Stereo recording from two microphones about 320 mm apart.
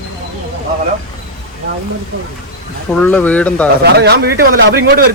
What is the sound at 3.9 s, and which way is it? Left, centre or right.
A man's voice, right.